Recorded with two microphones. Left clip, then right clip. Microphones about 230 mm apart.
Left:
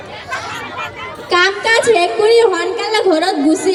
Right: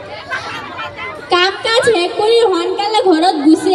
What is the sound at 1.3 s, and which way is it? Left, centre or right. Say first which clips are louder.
A woman's voice: left 1 dB; left.